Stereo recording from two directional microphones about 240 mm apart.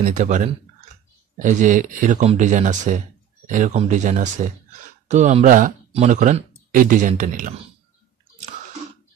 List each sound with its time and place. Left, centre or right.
0.0 s speech: right